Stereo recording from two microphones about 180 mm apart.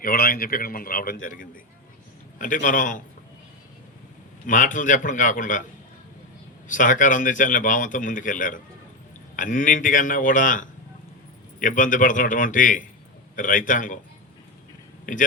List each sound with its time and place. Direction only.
0.0 s a man's voice: 55° left (ahead or behind)
4.4 s a man's voice: 45° left (ahead or behind)
6.7 s a man's voice: 45° left (ahead or behind)
15.1 s a man's voice: 45° left (ahead or behind)